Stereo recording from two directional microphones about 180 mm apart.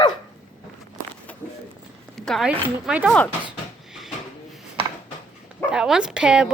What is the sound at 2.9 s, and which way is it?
Speech, 5° right (ahead or behind).